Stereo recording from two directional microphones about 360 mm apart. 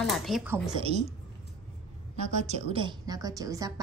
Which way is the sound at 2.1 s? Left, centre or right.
Centre.